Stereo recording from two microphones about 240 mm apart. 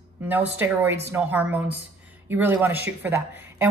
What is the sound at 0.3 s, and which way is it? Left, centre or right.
Speech, centre.